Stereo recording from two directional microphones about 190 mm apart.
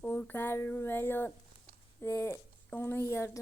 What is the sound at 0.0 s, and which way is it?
A woman's voice, 10° left (ahead or behind).